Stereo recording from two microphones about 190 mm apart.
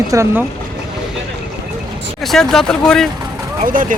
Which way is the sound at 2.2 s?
Centre (ahead or behind).